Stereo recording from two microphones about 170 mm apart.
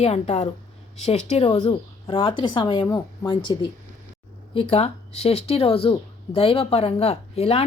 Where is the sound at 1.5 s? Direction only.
25° left (ahead or behind).